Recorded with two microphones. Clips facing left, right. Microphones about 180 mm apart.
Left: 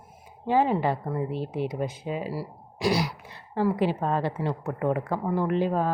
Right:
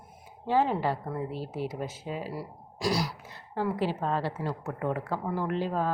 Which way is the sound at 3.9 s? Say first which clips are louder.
Left 3 dB; 10° left (ahead or behind).